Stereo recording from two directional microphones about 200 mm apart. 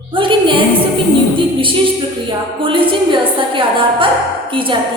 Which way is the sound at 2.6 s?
25° right (ahead or behind).